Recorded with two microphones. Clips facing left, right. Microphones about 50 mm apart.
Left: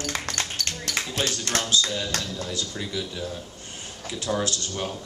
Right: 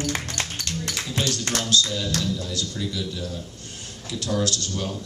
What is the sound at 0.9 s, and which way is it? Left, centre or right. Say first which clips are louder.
Speech: left 1 dB; left.